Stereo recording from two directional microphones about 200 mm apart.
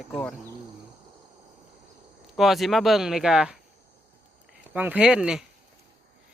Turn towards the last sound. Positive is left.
turn(degrees=0)  # may be behind; listen again after turning